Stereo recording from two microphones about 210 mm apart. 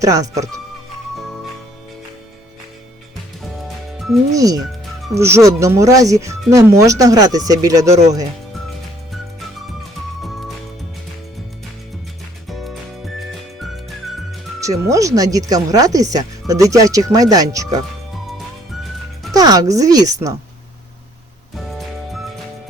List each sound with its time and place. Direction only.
0.0 s speech: 15° right (ahead or behind)
3.9 s music: centre (ahead or behind)
4.3 s speech: 15° right (ahead or behind)
12.5 s music: centre (ahead or behind)
14.6 s speech: 15° right (ahead or behind)
18.3 s music: centre (ahead or behind)
19.3 s speech: 15° right (ahead or behind)
21.5 s music: centre (ahead or behind)